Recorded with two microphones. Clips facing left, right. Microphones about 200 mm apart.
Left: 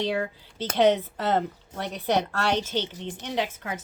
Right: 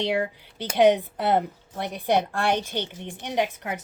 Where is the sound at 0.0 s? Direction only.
15° right (ahead or behind).